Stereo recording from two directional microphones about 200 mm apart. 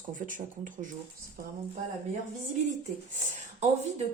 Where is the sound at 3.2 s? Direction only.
35° right (ahead or behind).